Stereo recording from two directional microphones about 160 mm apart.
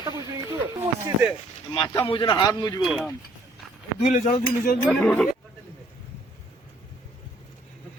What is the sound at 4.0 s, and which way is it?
Cutlery, 50° left (ahead or behind).